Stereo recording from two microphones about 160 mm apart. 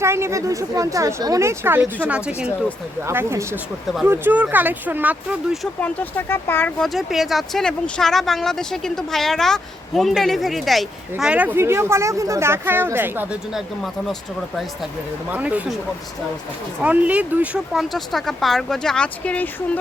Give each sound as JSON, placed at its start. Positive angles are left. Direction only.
{"t": 0.0, "sound": "speech", "side_deg": -15}
{"t": 5.8, "sound": "speech", "side_deg": 15}
{"t": 16.8, "sound": "speech", "side_deg": -10}